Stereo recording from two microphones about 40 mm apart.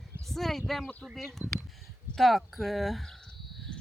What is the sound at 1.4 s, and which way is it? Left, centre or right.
Speech, right.